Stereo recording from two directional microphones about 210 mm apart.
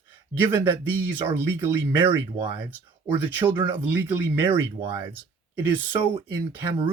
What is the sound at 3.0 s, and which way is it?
Speech, 10° right (ahead or behind).